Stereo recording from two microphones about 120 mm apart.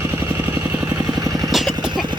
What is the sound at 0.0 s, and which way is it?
Vehicle, 20° right (ahead or behind).